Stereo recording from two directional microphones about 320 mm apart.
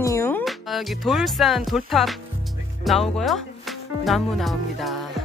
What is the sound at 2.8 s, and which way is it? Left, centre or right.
Music, centre.